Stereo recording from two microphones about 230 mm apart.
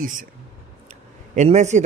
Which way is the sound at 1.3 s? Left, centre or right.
Right.